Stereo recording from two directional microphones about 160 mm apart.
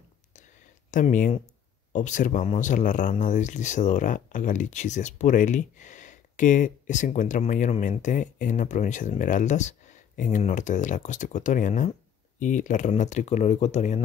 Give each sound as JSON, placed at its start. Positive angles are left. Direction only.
{"t": 0.9, "sound": "speech", "side_deg": 55}